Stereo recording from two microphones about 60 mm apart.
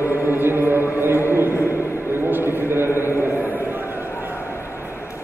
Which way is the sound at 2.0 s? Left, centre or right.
Right.